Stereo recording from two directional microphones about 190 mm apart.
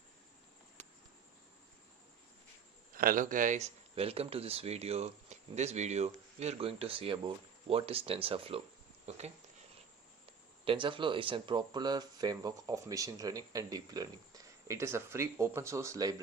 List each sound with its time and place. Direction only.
2.9 s speech: 45° right (ahead or behind); by 8.6 s 30° right (ahead or behind)
9.0 s a sound: 35° right (ahead or behind)
10.7 s speech: 25° right (ahead or behind)